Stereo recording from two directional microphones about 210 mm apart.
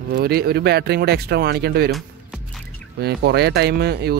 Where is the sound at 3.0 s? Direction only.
50° right (ahead or behind).